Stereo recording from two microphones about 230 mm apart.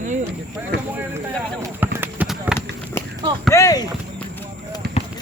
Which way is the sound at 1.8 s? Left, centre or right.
Centre.